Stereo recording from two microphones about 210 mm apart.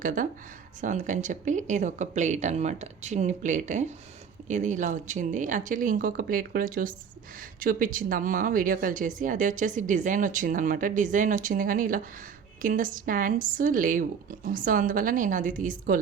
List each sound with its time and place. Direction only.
0.0 s a woman's voice: 40° right (ahead or behind)